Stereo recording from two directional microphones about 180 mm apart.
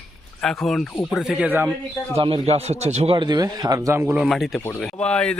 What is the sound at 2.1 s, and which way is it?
A man's voice, 30° right (ahead or behind).